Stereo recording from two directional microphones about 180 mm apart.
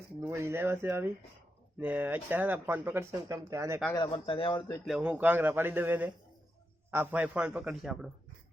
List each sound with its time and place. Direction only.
0.2 s speech: 15° right (ahead or behind)
3.9 s speech: 25° left (ahead or behind)
4.9 s speech: 5° right (ahead or behind)